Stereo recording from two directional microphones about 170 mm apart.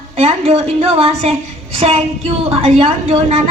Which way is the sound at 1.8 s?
40° right (ahead or behind).